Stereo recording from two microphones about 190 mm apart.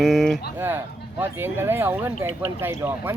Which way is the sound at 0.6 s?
10° right (ahead or behind).